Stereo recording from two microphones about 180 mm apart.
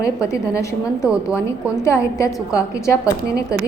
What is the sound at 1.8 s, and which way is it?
A woman's voice, 15° left (ahead or behind).